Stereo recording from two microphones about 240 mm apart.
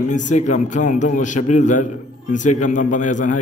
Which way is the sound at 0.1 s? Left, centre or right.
Left.